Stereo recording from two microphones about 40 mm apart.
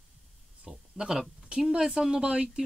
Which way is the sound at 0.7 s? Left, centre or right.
Centre.